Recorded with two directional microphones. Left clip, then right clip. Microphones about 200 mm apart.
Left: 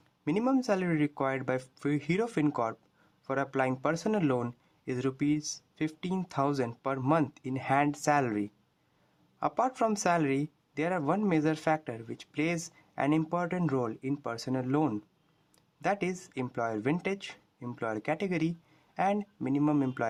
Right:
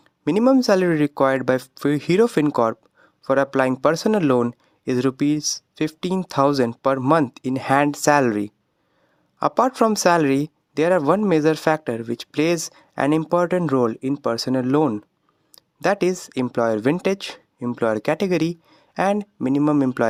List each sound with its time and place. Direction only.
0.3 s speech: 45° right (ahead or behind)